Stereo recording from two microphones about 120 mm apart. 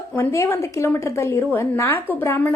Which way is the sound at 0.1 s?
25° left (ahead or behind).